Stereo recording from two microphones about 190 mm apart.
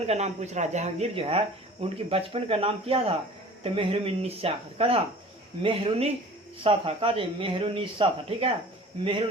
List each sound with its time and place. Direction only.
0.1 s speech: 35° right (ahead or behind)